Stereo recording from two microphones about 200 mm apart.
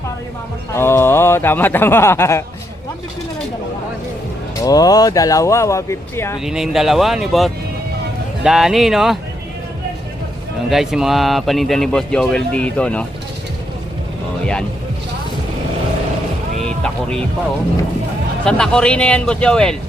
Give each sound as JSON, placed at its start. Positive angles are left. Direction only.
{"t": 0.7, "sound": "speech", "side_deg": 10}
{"t": 4.6, "sound": "speech", "side_deg": 20}
{"t": 6.4, "sound": "speech", "side_deg": 0}
{"t": 10.7, "sound": "speech", "side_deg": 0}
{"t": 16.6, "sound": "music", "side_deg": 5}
{"t": 18.4, "sound": "speech", "side_deg": 5}